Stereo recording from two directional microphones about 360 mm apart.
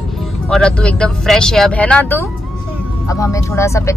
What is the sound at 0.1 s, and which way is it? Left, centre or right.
Speech, centre.